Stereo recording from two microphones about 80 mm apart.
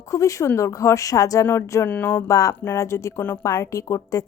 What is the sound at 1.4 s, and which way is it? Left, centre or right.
Speech, left.